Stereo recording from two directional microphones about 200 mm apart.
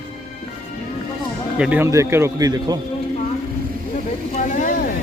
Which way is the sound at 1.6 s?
10° right (ahead or behind).